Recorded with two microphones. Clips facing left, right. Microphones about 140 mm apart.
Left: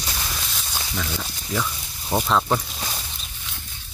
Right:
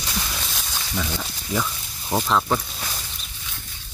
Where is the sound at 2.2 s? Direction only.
5° left (ahead or behind).